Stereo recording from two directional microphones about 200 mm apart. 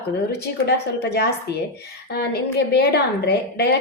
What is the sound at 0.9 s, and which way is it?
A woman's voice, 50° left (ahead or behind).